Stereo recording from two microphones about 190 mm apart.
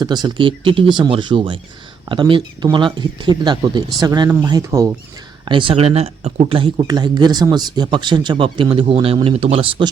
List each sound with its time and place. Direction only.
0.0 s speech: 20° right (ahead or behind)
5.5 s speech: 25° right (ahead or behind)